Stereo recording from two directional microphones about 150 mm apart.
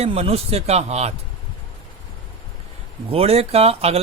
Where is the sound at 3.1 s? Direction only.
40° right (ahead or behind).